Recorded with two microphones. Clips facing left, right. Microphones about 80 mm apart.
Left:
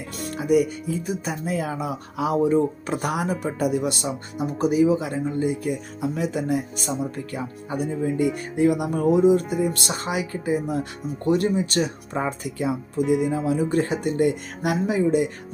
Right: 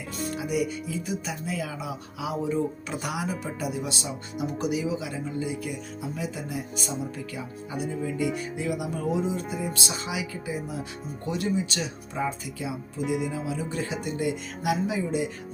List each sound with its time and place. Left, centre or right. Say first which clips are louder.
0.2 s speech: left 7 dB; left
4.4 s speech: left 8 dB; left
13.0 s speech: left 7 dB; centre
13.5 s speech: left 9 dB; left